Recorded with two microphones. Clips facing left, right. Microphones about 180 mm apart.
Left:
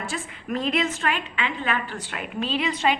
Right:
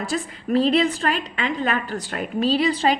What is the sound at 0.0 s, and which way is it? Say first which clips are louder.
A woman's voice: right 6 dB; 35° right (ahead or behind).